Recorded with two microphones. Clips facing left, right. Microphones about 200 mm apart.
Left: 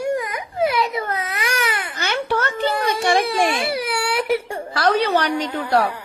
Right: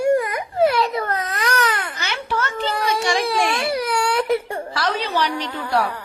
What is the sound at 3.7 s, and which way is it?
Whimper, 10° left (ahead or behind).